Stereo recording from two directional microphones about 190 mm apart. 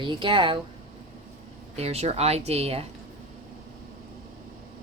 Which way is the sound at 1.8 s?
35° right (ahead or behind).